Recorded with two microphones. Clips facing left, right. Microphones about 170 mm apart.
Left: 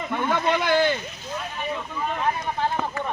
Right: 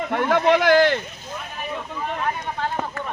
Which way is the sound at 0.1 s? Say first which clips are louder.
Right 5 dB; 75° right (ahead or behind).